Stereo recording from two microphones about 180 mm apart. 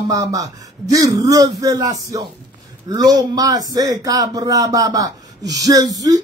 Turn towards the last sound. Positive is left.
turn(degrees=-20)  # may be behind; listen again after turning